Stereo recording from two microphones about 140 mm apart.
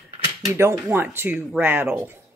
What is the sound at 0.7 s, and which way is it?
Speech, 10° right (ahead or behind).